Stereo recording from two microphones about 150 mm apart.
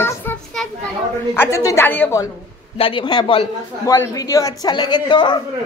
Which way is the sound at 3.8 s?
20° left (ahead or behind).